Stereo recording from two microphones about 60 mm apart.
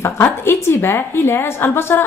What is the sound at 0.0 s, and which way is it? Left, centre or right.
A woman's voice, left.